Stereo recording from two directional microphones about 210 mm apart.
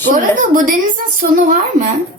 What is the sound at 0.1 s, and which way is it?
A woman's voice, 40° right (ahead or behind).